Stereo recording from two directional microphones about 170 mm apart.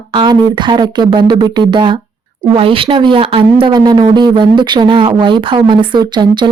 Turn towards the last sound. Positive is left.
turn(degrees=-25)  # may be behind; listen again after turning